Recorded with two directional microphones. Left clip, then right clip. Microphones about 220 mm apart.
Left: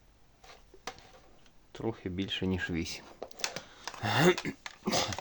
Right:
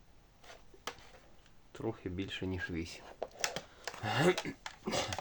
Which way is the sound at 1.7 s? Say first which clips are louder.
Left 3 dB; 25° left (ahead or behind).